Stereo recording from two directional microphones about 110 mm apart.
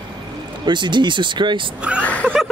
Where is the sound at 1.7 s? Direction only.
10° right (ahead or behind).